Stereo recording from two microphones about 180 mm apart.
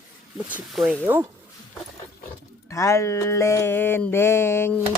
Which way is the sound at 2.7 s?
15° left (ahead or behind).